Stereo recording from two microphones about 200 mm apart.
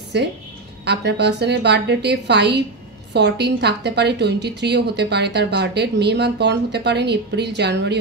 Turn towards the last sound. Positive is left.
turn(degrees=-55)  # may be behind; listen again after turning